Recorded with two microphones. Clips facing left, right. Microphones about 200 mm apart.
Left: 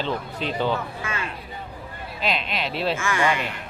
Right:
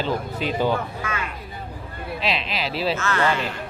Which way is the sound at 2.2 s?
Centre (ahead or behind).